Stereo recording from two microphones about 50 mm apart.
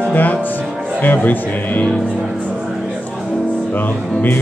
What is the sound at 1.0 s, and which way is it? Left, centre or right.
Music, left.